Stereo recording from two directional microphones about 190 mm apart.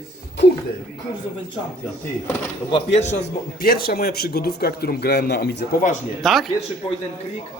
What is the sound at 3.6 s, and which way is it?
A man's voice, 50° left (ahead or behind).